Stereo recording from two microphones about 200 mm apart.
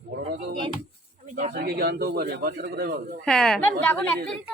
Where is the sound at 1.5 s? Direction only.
55° right (ahead or behind).